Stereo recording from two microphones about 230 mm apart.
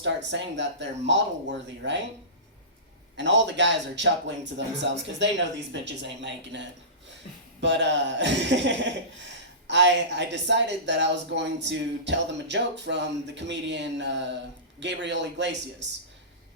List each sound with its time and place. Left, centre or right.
0.0 s a woman's voice: right
3.2 s a woman's voice: right
7.6 s a woman's voice: right